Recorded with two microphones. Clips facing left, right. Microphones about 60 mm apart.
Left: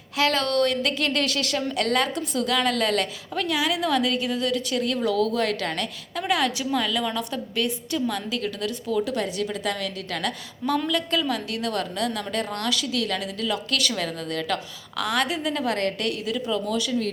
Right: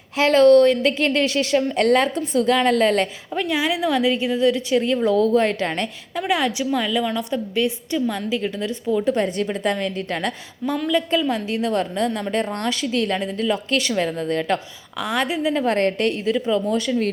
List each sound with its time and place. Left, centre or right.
0.2 s a woman's voice: right
9.0 s a woman's voice: right
10.9 s a woman's voice: right